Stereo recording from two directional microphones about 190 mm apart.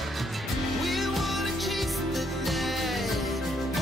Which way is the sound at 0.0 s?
Centre (ahead or behind).